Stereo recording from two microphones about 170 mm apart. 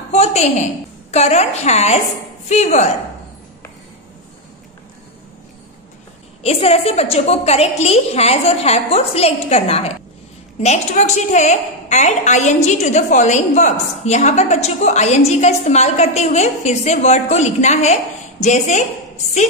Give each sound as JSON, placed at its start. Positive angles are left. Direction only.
{"t": 0.1, "sound": "a woman's voice", "side_deg": 40}
{"t": 6.4, "sound": "a woman's voice", "side_deg": 35}